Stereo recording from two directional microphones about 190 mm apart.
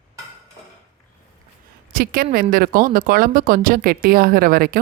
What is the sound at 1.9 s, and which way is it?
A woman's voice, 50° right (ahead or behind).